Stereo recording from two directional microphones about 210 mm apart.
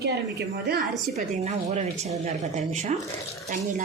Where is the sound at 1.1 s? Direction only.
30° right (ahead or behind).